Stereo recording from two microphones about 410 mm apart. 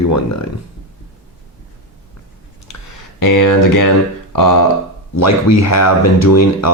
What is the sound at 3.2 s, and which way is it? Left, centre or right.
Speech, left.